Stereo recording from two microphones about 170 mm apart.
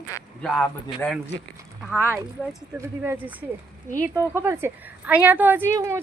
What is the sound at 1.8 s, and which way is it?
A woman's voice, 10° right (ahead or behind).